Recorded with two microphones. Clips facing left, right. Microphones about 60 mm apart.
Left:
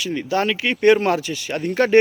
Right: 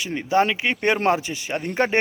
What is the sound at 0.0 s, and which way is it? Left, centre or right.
Speech, right.